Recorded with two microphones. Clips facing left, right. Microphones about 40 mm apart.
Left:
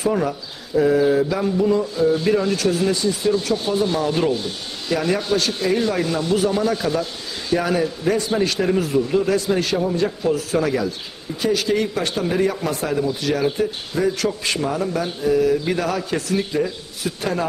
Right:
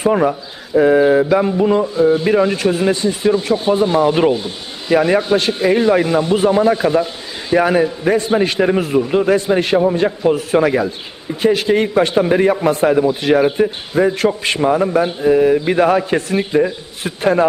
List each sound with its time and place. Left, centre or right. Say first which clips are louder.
0.0 s a man's voice: right 6 dB; right
2.0 s speech: right 7 dB; right
4.4 s a man's voice: right 2 dB; right